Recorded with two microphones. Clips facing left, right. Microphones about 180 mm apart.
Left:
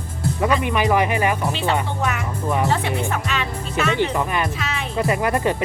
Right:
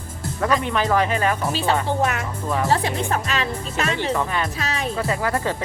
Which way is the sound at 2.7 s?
35° right (ahead or behind).